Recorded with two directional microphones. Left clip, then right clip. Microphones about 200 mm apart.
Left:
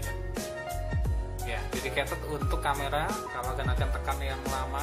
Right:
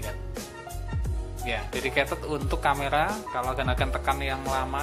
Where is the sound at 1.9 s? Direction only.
30° right (ahead or behind).